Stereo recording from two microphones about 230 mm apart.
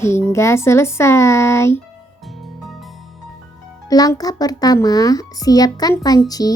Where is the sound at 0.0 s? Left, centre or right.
Centre.